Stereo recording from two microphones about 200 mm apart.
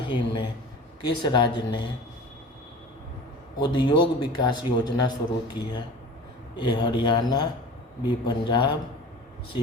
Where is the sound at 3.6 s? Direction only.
20° left (ahead or behind).